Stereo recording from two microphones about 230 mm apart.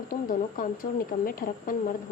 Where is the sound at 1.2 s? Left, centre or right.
Left.